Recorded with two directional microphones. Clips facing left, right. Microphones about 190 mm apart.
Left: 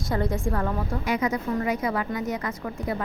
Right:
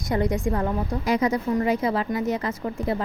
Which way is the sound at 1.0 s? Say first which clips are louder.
Right 4 dB; 35° right (ahead or behind).